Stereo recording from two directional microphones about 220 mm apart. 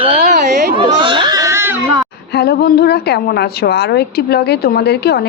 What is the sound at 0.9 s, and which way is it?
Baby cry, 20° right (ahead or behind).